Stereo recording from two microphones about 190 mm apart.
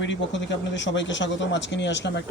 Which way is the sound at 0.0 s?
70° left (ahead or behind).